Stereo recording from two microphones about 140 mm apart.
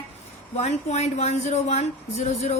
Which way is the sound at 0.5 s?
50° left (ahead or behind).